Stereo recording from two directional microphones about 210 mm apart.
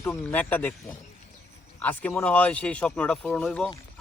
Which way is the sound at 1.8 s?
10° left (ahead or behind).